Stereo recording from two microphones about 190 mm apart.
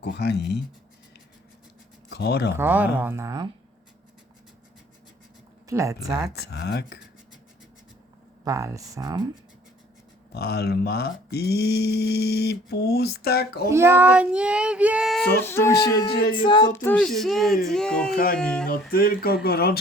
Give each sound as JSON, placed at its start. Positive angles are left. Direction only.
{"t": 0.0, "sound": "speech", "side_deg": 60}
{"t": 2.0, "sound": "speech", "side_deg": 60}
{"t": 2.6, "sound": "child singing", "side_deg": -10}
{"t": 5.6, "sound": "child singing", "side_deg": -15}
{"t": 6.4, "sound": "speech", "side_deg": 60}
{"t": 8.4, "sound": "child singing", "side_deg": -15}
{"t": 10.3, "sound": "speech", "side_deg": 55}
{"t": 13.7, "sound": "child singing", "side_deg": -10}
{"t": 15.4, "sound": "music", "side_deg": 15}
{"t": 16.1, "sound": "speech", "side_deg": 50}
{"t": 16.4, "sound": "child singing", "side_deg": 25}
{"t": 16.8, "sound": "speech", "side_deg": 5}
{"t": 18.7, "sound": "speech", "side_deg": 50}